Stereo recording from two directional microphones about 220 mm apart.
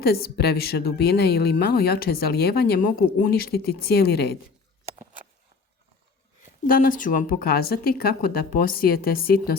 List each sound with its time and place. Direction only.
0.0 s a woman's voice: 45° left (ahead or behind)
4.9 s a sound: 35° right (ahead or behind)
6.7 s a woman's voice: 40° left (ahead or behind)